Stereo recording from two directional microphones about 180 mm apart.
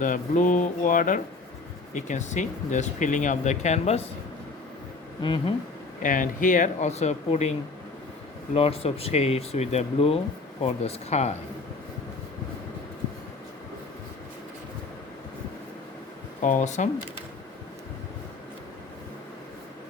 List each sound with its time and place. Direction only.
0.0 s speech: 45° left (ahead or behind)
5.2 s speech: 30° left (ahead or behind)
6.0 s speech: 50° left (ahead or behind)
8.5 s speech: 35° left (ahead or behind)
16.4 s speech: 45° left (ahead or behind)